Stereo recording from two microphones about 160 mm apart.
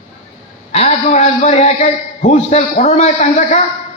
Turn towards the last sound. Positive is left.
turn(degrees=45)  # may be behind; listen again after turning